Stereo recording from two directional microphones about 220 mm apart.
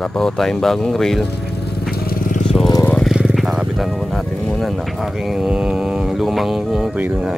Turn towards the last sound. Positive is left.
turn(degrees=-5)  # may be behind; listen again after turning